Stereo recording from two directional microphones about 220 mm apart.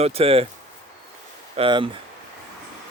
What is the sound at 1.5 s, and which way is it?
Speech, 25° right (ahead or behind).